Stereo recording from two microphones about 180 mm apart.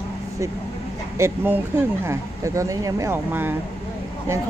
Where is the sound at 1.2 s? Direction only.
10° right (ahead or behind).